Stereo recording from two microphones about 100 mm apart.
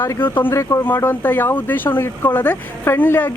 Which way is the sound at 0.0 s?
20° left (ahead or behind).